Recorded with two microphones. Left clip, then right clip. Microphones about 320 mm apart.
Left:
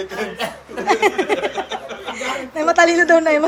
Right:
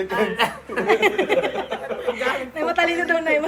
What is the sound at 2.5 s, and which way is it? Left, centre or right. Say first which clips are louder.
Speech: left 10 dB; centre.